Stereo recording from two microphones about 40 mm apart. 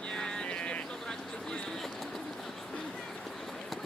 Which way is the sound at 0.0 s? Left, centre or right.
Left.